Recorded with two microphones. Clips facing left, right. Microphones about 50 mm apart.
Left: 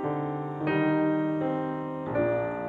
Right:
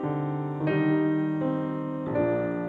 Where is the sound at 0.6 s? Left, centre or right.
Centre.